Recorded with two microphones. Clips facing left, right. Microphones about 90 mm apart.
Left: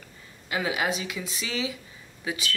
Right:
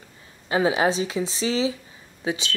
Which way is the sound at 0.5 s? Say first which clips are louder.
Right 7 dB; 30° right (ahead or behind).